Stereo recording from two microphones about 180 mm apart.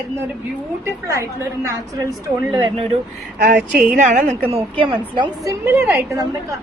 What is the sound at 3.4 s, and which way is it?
Speech, 45° right (ahead or behind).